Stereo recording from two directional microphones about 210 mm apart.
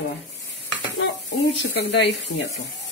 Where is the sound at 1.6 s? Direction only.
60° left (ahead or behind).